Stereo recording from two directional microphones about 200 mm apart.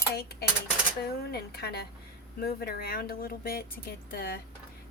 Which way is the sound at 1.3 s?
55° left (ahead or behind).